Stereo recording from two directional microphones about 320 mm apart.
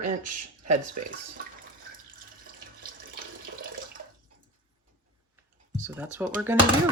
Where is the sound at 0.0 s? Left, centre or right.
Right.